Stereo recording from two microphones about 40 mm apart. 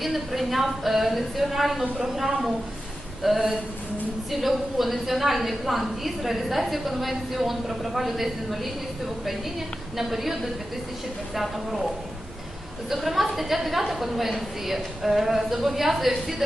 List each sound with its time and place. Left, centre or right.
0.0 s a woman's voice: centre
3.2 s a woman's voice: centre
10.0 s a woman's voice: centre
12.9 s a woman's voice: centre